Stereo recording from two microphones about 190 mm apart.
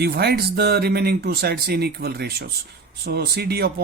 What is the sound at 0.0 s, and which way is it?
Speech, 55° right (ahead or behind).